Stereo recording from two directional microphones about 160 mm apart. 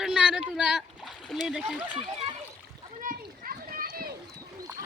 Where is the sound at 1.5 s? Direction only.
Centre (ahead or behind).